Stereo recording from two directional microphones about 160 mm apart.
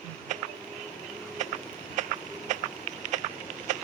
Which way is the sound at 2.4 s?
50° right (ahead or behind).